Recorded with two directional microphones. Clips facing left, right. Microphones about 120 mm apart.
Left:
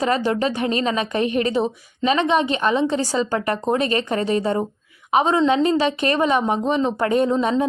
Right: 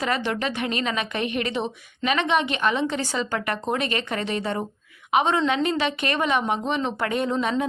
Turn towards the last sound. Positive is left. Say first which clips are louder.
# left 5 dB
turn(degrees=30)  # may be behind; listen again after turning